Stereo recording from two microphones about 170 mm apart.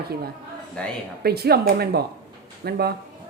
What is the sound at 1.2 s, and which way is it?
A woman's voice, 70° right (ahead or behind).